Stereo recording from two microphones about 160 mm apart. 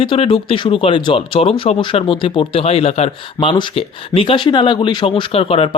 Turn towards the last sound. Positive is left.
turn(degrees=35)  # may be behind; listen again after turning